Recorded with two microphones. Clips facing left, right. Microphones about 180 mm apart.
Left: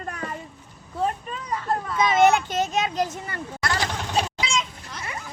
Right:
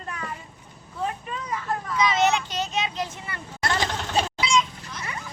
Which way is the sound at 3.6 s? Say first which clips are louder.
Right 1 dB; 25° right (ahead or behind).